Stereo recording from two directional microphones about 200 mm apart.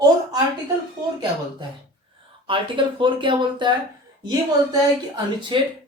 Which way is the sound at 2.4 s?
25° right (ahead or behind).